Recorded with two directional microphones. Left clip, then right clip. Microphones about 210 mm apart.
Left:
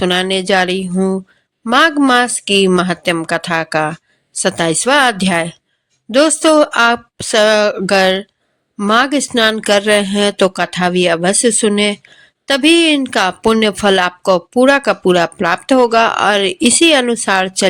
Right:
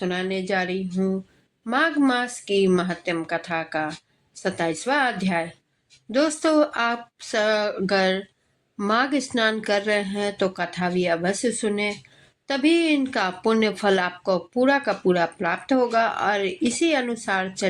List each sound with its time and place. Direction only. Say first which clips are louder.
0.0 s a woman's voice: left 12 dB; 40° left (ahead or behind)